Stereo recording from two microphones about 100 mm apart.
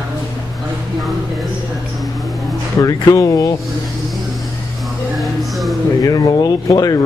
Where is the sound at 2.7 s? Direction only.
35° left (ahead or behind).